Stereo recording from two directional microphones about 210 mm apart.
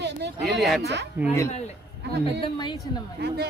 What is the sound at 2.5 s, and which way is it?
Speech, 20° left (ahead or behind).